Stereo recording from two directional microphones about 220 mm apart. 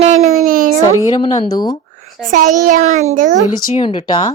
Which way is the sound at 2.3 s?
35° right (ahead or behind).